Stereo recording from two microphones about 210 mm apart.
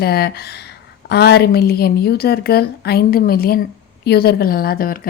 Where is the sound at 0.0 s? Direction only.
50° left (ahead or behind).